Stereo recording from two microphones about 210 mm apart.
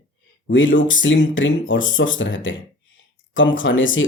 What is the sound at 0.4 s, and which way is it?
Speech, 65° left (ahead or behind).